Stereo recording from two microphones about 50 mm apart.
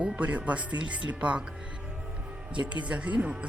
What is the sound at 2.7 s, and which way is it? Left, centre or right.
Speech, right.